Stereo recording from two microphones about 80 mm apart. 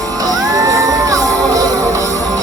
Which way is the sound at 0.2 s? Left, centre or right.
Right.